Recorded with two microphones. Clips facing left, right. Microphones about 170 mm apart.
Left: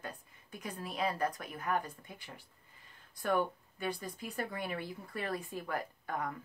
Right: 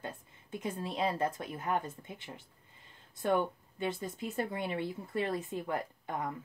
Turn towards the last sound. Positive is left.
turn(degrees=-20)  # may be behind; listen again after turning